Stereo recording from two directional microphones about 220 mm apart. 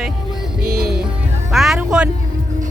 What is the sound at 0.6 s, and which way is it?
Music, 40° right (ahead or behind).